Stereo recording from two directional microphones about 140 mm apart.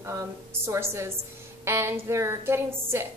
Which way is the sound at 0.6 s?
20° right (ahead or behind).